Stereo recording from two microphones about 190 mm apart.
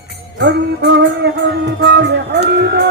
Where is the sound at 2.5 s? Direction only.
60° right (ahead or behind).